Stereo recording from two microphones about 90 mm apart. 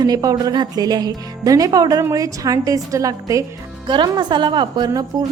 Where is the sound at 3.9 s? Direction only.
55° right (ahead or behind).